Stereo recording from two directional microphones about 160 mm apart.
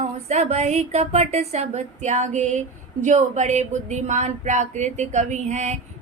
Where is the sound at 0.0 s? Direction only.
40° right (ahead or behind).